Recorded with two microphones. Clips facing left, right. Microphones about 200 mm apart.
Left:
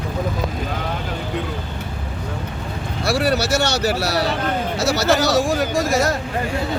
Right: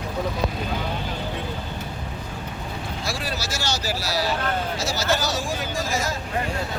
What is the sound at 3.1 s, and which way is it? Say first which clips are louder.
Speech: left 13 dB; 70° left (ahead or behind).